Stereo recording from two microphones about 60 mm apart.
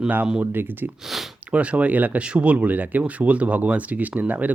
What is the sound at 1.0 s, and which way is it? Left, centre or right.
Speech, centre.